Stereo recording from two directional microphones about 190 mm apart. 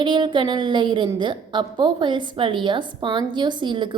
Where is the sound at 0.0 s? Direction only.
25° right (ahead or behind).